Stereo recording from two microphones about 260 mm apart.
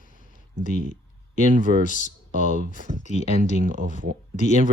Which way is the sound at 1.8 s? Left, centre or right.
Left.